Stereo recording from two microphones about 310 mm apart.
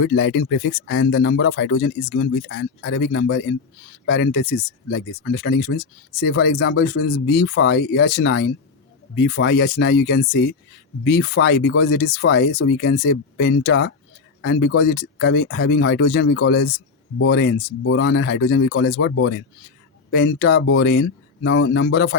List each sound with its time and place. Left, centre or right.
0.0 s speech: left